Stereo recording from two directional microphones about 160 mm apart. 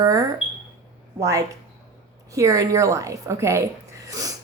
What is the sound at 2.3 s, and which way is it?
A woman's voice, 20° right (ahead or behind).